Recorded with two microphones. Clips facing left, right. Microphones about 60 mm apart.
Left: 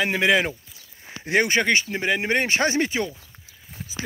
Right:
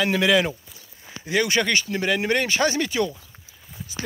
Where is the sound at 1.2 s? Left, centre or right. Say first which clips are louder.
Left 2 dB; left.